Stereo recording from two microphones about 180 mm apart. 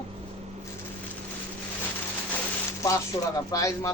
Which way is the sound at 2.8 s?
20° left (ahead or behind).